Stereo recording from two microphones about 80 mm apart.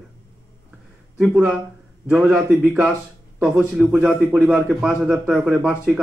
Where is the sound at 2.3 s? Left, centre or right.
Centre.